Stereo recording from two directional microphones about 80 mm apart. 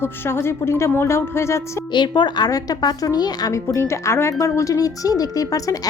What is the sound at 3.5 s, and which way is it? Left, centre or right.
Speech, left.